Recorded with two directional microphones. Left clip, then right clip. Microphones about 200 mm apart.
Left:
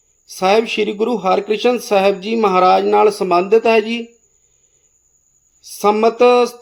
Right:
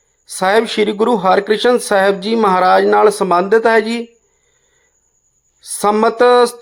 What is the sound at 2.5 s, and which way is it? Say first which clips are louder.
Speech: even; 40° right (ahead or behind).